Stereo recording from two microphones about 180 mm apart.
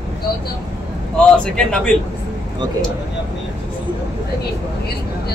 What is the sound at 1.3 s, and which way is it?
Speech, 5° left (ahead or behind).